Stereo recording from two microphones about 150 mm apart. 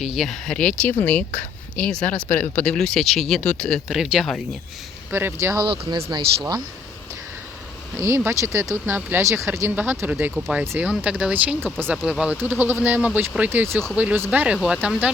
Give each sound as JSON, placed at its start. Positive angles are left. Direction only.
{"t": 0.0, "sound": "speech", "side_deg": 0}
{"t": 5.1, "sound": "speech", "side_deg": -15}
{"t": 5.6, "sound": "speech", "side_deg": -35}
{"t": 7.9, "sound": "speech", "side_deg": -20}